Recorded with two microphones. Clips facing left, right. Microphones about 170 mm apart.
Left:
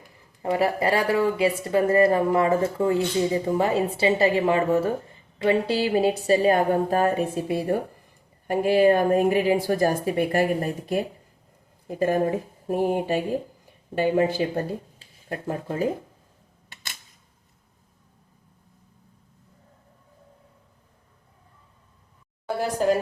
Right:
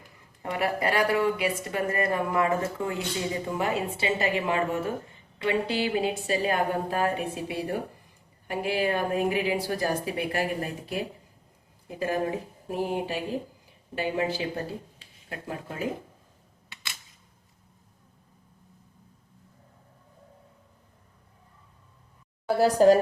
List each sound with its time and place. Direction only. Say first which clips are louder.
0.5 s a woman's voice: left 4 dB; 30° left (ahead or behind)
22.5 s a woman's voice: right 5 dB; 35° right (ahead or behind)